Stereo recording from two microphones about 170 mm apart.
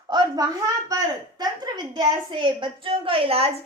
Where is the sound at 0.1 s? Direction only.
25° right (ahead or behind).